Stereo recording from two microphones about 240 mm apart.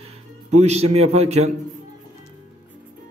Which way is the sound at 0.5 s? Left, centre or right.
Right.